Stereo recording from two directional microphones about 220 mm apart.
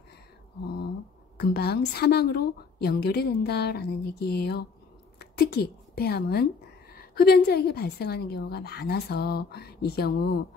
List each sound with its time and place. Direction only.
1.4 s a woman's voice: 45° left (ahead or behind)